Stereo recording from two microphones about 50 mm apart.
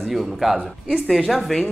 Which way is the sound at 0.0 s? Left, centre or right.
Centre.